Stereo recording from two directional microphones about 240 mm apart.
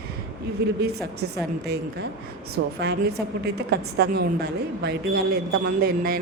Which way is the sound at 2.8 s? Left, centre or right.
Right.